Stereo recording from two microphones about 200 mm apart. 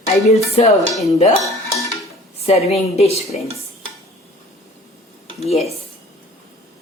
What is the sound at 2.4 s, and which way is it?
Speech, 30° left (ahead or behind).